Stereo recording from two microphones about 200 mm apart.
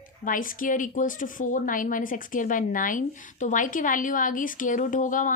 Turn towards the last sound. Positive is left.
turn(degrees=40)  # may be behind; listen again after turning